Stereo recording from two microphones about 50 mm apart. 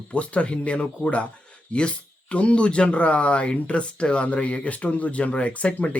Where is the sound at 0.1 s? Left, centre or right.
Left.